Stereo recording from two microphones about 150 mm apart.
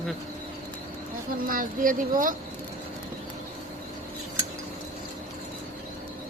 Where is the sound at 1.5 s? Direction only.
65° right (ahead or behind).